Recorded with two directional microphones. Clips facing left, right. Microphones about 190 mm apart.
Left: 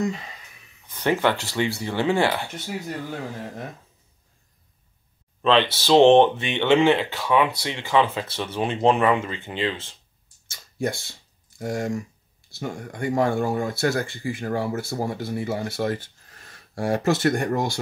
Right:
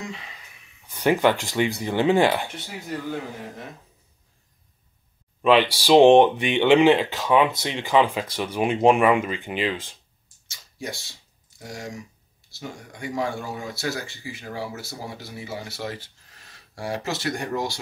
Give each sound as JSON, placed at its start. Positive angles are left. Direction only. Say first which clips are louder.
{"t": 0.8, "sound": "speech", "louder": "right 2 dB", "side_deg": -15}
{"t": 5.4, "sound": "speech", "louder": "right 2 dB", "side_deg": -10}
{"t": 10.5, "sound": "a sound", "louder": "left 7 dB", "side_deg": 55}
{"t": 12.4, "sound": "speech", "louder": "left 6 dB", "side_deg": 55}